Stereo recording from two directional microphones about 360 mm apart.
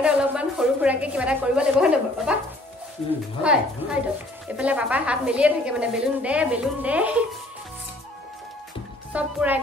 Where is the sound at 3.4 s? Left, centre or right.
Centre.